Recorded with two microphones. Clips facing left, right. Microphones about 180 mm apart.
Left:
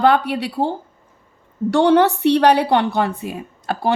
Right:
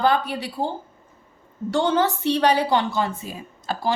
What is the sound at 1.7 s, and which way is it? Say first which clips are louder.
A woman's voice: left 7 dB; 70° left (ahead or behind).